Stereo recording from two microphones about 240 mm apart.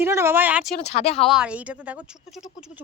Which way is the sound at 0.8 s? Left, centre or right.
Left.